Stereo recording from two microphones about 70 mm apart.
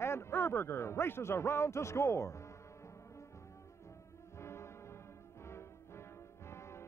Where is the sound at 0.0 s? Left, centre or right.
Left.